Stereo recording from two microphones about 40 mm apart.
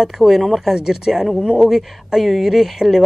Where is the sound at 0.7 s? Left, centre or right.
Centre.